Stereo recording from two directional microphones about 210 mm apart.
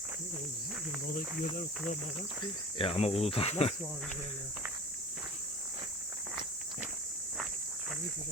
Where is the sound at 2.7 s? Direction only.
25° left (ahead or behind).